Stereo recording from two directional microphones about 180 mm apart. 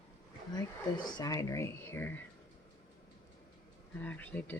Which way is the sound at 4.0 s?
10° left (ahead or behind).